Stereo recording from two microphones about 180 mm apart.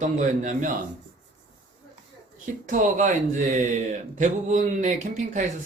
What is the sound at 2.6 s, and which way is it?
A man's voice, 45° right (ahead or behind).